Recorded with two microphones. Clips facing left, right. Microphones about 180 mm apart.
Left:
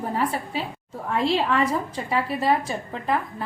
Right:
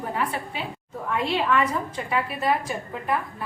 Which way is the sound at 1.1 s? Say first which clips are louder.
Left 1 dB; 35° left (ahead or behind).